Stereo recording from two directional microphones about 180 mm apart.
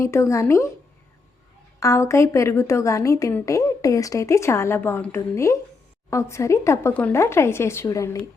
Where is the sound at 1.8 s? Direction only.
15° left (ahead or behind).